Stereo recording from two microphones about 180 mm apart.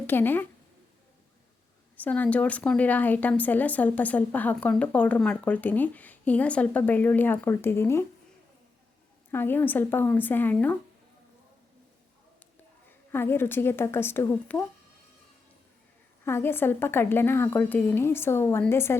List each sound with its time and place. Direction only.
0.1 s speech: 10° left (ahead or behind)
2.0 s speech: 10° left (ahead or behind)
9.3 s speech: 10° left (ahead or behind)
13.1 s speech: 10° left (ahead or behind)
16.2 s speech: 10° left (ahead or behind)